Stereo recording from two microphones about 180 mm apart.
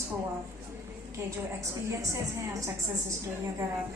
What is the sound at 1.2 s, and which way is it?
A woman's voice, 15° right (ahead or behind).